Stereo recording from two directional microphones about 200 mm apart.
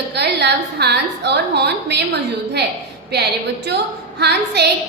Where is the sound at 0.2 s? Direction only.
55° right (ahead or behind).